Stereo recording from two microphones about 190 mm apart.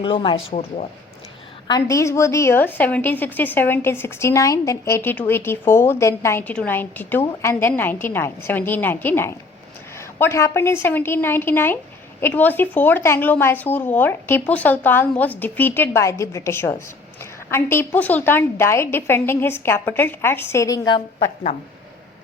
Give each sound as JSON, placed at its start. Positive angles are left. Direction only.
{"t": 0.0, "sound": "speech", "side_deg": 25}
{"t": 1.6, "sound": "a woman's voice", "side_deg": 20}